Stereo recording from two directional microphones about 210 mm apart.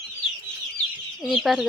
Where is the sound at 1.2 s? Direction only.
Centre (ahead or behind).